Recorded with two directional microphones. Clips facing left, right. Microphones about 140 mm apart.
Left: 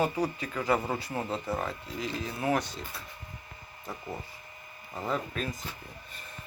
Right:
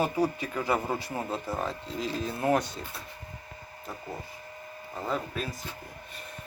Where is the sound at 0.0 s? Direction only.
15° right (ahead or behind).